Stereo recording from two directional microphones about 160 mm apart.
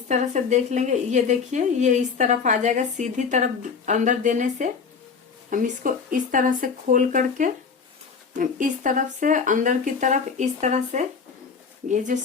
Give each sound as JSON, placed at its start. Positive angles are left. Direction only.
{"t": 0.1, "sound": "speech", "side_deg": -45}